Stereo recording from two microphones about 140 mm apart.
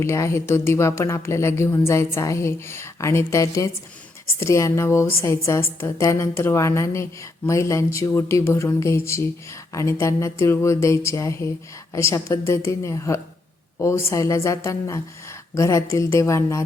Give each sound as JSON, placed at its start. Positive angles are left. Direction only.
{"t": 0.0, "sound": "a woman's voice", "side_deg": 20}